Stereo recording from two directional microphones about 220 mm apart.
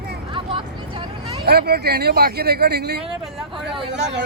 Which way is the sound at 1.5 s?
45° right (ahead or behind).